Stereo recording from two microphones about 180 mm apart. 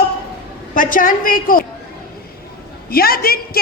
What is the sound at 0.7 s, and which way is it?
Speech, 50° left (ahead or behind).